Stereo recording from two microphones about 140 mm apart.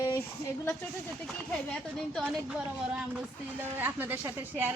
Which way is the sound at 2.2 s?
5° right (ahead or behind).